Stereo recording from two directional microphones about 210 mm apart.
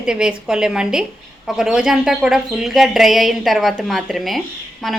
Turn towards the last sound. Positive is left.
turn(degrees=0)  # may be behind; listen again after turning